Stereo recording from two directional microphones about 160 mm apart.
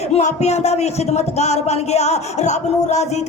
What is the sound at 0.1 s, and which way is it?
Speech, 45° left (ahead or behind).